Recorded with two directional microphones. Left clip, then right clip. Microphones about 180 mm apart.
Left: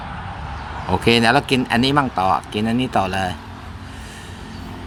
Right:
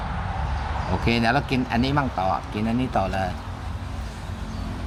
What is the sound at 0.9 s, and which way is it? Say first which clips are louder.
Speech: left 8 dB; 35° left (ahead or behind).